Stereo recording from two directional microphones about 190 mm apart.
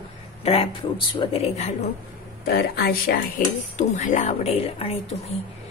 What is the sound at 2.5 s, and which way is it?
Speech, 55° left (ahead or behind).